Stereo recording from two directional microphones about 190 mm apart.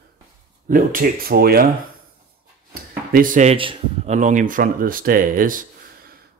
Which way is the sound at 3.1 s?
45° right (ahead or behind).